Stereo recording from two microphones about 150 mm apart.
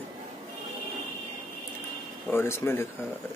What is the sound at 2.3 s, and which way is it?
Speech, 15° left (ahead or behind).